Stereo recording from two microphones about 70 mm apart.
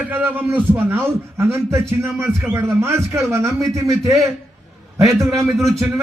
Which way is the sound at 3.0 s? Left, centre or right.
Centre.